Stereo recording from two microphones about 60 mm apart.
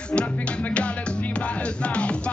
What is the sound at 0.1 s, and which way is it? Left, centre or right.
Music, centre.